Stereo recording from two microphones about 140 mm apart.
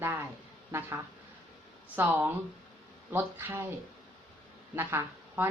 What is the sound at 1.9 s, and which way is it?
A woman's voice, 15° right (ahead or behind).